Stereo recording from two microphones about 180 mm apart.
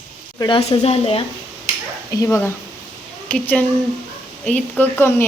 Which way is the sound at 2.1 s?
15° left (ahead or behind).